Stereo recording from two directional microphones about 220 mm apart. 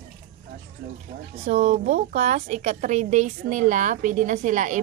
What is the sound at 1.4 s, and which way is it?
A woman's voice, 30° right (ahead or behind).